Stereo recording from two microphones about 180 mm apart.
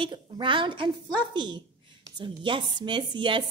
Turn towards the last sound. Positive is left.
turn(degrees=-25)  # may be behind; listen again after turning